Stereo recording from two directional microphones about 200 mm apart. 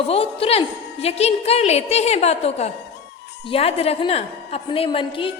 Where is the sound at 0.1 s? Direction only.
30° left (ahead or behind).